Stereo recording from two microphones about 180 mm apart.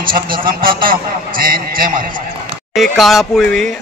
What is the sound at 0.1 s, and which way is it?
A man's voice, 55° right (ahead or behind).